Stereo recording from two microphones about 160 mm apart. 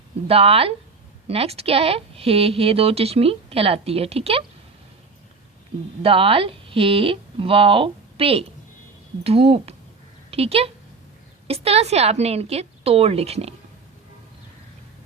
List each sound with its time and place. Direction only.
0.3 s a woman's voice: 35° right (ahead or behind)
6.0 s a woman's voice: 35° right (ahead or behind)